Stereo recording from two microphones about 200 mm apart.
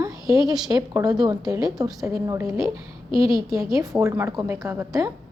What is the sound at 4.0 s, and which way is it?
A woman's voice, 15° right (ahead or behind).